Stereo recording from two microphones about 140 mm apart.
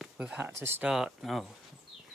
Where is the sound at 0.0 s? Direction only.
5° right (ahead or behind).